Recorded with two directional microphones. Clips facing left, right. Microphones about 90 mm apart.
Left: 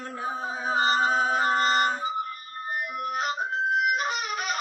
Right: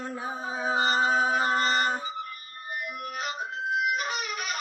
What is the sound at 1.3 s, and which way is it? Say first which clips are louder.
Mantra: left 2 dB; 30° left (ahead or behind).